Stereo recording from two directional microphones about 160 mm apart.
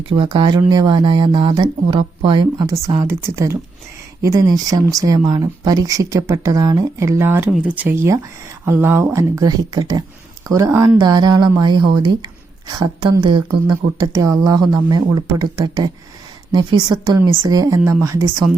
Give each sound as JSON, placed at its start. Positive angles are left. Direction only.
{"t": 0.1, "sound": "speech", "side_deg": -30}
{"t": 3.0, "sound": "speech", "side_deg": -15}
{"t": 14.1, "sound": "speech", "side_deg": -20}